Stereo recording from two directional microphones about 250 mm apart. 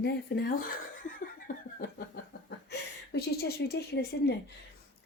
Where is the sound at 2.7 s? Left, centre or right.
Left.